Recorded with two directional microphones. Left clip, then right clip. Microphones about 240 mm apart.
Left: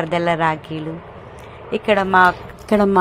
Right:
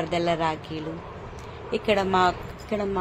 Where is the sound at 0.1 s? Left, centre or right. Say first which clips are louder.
Left 7 dB; centre.